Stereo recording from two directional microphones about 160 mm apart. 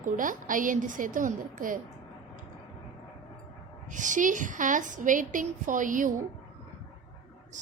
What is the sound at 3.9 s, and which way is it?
A woman's voice, 50° right (ahead or behind).